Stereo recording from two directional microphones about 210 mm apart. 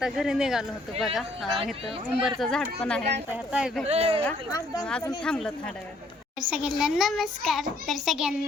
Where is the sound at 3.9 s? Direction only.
30° right (ahead or behind).